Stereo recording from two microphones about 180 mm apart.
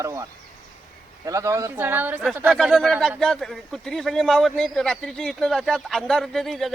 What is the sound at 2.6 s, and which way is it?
Speech, centre (ahead or behind).